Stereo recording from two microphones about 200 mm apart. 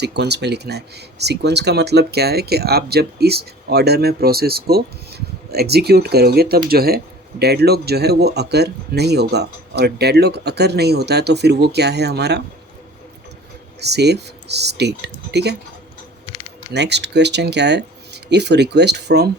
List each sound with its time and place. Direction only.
0.0 s speech: 55° right (ahead or behind)
13.7 s speech: 55° right (ahead or behind)
16.7 s speech: 60° right (ahead or behind)